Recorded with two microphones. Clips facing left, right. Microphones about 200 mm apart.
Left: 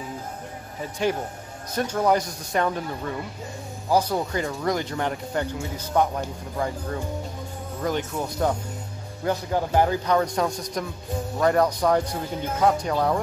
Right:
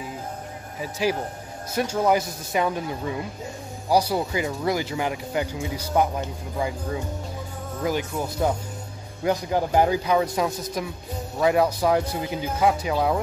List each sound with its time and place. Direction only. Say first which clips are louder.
1.0 s speech: even; 5° right (ahead or behind)
7.8 s speech: right 1 dB; 5° right (ahead or behind)